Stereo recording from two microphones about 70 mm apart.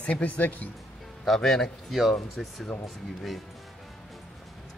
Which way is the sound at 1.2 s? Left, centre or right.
Centre.